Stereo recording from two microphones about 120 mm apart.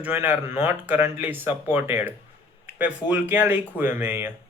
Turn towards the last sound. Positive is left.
turn(degrees=-15)  # may be behind; listen again after turning